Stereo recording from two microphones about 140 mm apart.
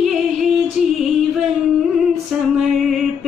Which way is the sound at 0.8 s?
Centre (ahead or behind).